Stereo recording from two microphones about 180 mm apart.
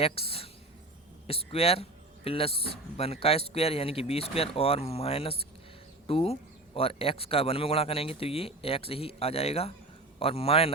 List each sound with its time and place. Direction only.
0.0 s speech: 30° left (ahead or behind)